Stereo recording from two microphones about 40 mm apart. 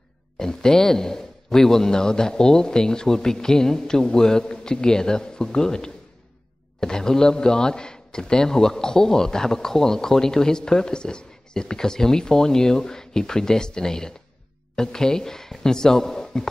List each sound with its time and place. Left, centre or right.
0.4 s speech: centre